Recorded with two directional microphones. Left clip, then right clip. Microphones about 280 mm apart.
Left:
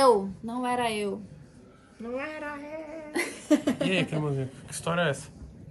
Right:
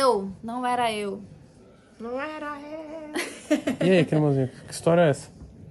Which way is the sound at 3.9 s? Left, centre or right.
Right.